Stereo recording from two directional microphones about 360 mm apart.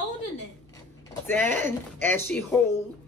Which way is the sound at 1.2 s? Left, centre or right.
Centre.